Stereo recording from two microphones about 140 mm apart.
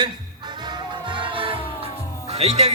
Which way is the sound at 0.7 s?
35° right (ahead or behind).